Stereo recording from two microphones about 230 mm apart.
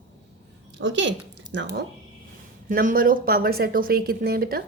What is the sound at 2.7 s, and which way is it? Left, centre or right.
A woman's voice, right.